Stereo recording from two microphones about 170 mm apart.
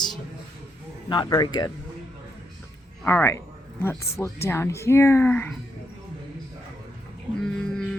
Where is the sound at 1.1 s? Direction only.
25° left (ahead or behind).